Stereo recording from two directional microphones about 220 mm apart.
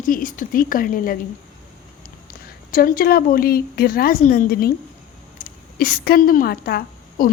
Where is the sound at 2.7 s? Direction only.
40° left (ahead or behind).